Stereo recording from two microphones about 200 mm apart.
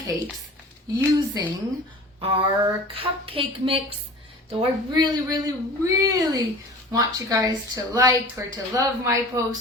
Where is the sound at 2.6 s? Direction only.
25° right (ahead or behind).